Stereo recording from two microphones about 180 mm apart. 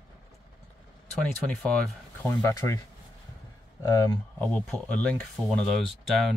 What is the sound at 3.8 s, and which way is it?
Speech, 20° left (ahead or behind).